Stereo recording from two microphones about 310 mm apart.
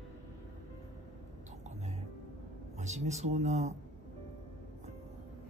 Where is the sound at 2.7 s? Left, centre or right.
Right.